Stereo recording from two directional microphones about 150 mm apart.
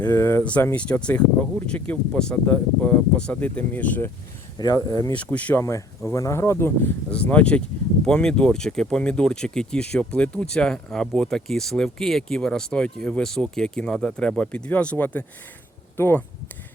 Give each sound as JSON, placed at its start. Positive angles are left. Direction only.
{"t": 0.1, "sound": "speech", "side_deg": 15}
{"t": 4.5, "sound": "speech", "side_deg": 25}
{"t": 5.1, "sound": "speech", "side_deg": 10}